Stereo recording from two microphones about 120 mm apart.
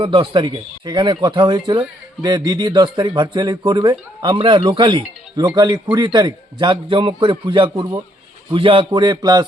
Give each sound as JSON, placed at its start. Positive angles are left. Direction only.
{"t": 0.0, "sound": "a man's voice", "side_deg": -45}